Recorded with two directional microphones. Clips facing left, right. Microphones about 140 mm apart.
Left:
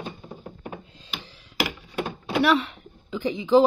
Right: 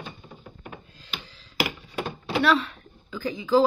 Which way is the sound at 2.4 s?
20° left (ahead or behind).